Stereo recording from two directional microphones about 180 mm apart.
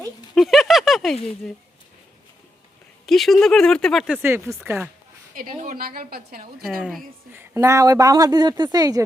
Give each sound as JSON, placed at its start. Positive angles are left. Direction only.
{"t": 0.3, "sound": "a sound", "side_deg": 0}
{"t": 3.1, "sound": "speech", "side_deg": 0}
{"t": 5.3, "sound": "a woman's voice", "side_deg": -50}
{"t": 6.6, "sound": "speech", "side_deg": 0}
{"t": 7.3, "sound": "speech", "side_deg": -15}